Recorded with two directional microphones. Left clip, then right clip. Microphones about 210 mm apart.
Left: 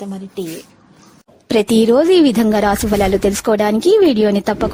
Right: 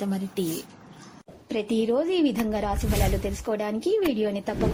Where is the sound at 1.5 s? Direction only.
60° left (ahead or behind).